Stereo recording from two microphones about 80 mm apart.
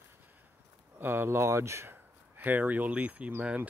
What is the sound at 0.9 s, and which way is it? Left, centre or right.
Speech, right.